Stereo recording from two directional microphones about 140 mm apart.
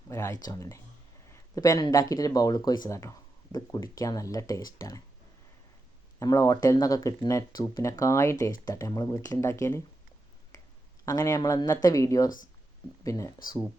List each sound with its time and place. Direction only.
0.1 s speech: 20° left (ahead or behind)
6.1 s speech: 20° left (ahead or behind)
11.0 s speech: 20° left (ahead or behind)